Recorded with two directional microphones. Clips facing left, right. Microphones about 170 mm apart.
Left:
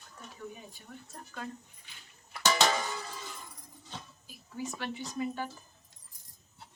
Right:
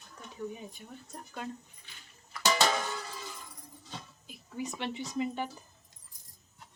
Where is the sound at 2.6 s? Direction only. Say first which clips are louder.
Even; centre (ahead or behind).